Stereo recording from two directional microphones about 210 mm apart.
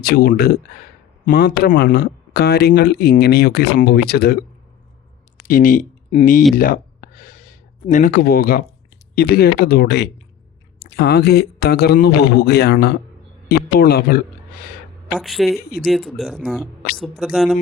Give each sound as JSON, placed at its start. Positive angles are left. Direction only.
{"t": 0.0, "sound": "speech", "side_deg": 45}
{"t": 5.5, "sound": "speech", "side_deg": 40}
{"t": 6.6, "sound": "a sound", "side_deg": 40}
{"t": 9.1, "sound": "speech", "side_deg": 45}
{"t": 15.1, "sound": "speech", "side_deg": 0}